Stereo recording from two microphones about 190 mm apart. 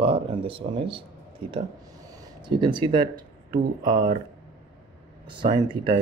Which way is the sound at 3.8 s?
45° right (ahead or behind).